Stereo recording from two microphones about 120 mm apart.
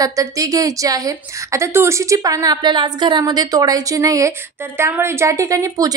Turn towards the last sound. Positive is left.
turn(degrees=-30)  # may be behind; listen again after turning